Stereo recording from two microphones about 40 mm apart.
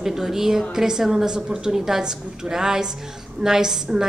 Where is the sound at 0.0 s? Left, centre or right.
Centre.